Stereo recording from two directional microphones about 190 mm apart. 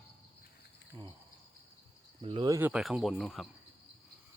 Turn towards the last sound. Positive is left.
turn(degrees=0)  # may be behind; listen again after turning